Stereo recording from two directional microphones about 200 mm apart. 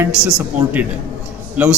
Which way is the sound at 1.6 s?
10° right (ahead or behind).